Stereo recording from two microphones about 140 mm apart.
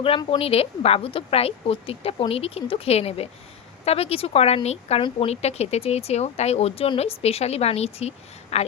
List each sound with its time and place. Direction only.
0.3 s speech: 45° left (ahead or behind)